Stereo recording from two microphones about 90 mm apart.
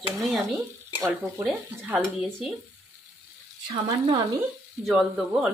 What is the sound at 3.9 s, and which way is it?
Speech, 40° right (ahead or behind).